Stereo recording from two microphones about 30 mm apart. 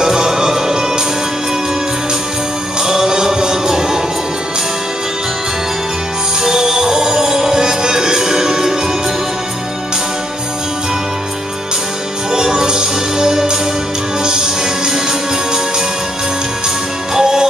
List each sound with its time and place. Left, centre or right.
0.0 s music: centre
2.8 s music: centre
6.4 s music: centre
12.3 s music: right
17.1 s music: right